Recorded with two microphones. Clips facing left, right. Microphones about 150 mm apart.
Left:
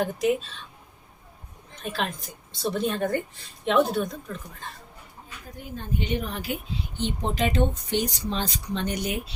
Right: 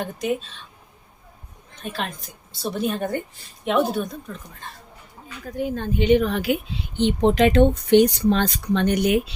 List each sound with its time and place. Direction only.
1.8 s speech: centre (ahead or behind)
5.5 s speech: 90° right